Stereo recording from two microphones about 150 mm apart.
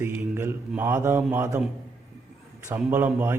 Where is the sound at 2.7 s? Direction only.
10° right (ahead or behind).